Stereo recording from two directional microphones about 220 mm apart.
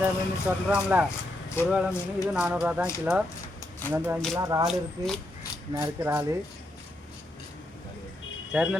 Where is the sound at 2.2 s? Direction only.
5° right (ahead or behind).